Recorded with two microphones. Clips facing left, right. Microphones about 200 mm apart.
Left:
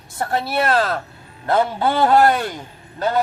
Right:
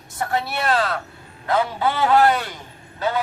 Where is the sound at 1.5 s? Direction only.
50° left (ahead or behind).